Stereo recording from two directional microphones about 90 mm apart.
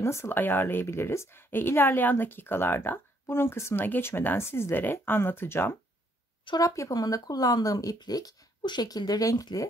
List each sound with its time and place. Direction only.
0.0 s a woman's voice: 30° left (ahead or behind)
6.6 s speech: 40° left (ahead or behind)